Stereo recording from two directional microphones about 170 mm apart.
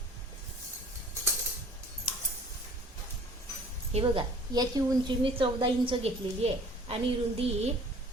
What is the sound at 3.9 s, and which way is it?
A woman's voice, 30° right (ahead or behind).